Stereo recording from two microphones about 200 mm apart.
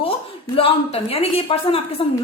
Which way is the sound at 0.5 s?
30° left (ahead or behind).